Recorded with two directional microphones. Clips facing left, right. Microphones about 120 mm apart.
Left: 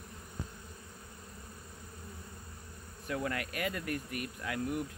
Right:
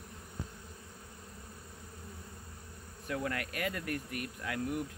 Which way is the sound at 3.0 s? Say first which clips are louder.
Even; 20° left (ahead or behind).